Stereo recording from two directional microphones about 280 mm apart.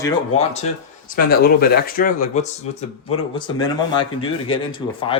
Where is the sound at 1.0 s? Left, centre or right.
Left.